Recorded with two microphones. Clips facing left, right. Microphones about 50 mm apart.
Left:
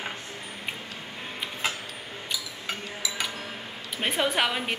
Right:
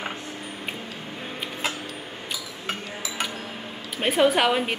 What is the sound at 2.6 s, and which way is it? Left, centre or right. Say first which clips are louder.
Chink: right 2 dB; right.